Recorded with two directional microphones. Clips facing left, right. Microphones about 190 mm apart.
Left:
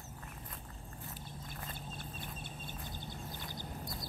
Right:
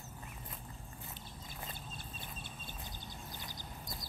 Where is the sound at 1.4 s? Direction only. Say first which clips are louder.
Even; 55° left (ahead or behind).